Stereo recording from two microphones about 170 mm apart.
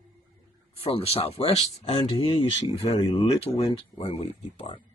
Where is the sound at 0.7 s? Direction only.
35° left (ahead or behind).